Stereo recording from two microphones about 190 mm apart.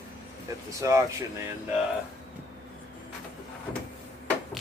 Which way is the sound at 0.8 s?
15° right (ahead or behind).